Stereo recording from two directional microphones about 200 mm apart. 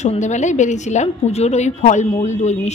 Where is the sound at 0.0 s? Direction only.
35° left (ahead or behind).